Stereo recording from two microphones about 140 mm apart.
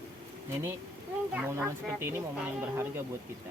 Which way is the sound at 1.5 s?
20° right (ahead or behind).